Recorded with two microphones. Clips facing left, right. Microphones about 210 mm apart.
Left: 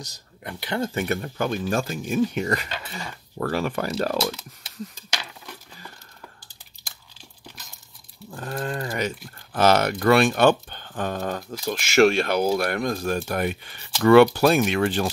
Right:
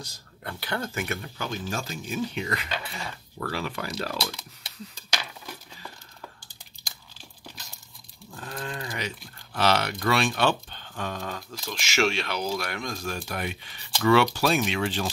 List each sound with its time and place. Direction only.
0.4 s speech: 20° left (ahead or behind)
0.9 s speech: 40° left (ahead or behind)
8.3 s speech: 45° left (ahead or behind)